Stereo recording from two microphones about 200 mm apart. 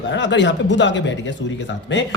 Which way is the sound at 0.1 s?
65° left (ahead or behind).